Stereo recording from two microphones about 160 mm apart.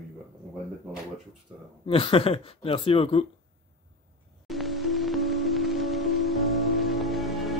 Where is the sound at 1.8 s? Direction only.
35° left (ahead or behind).